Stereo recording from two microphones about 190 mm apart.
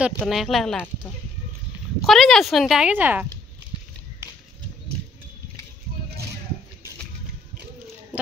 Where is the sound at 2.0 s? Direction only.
Centre (ahead or behind).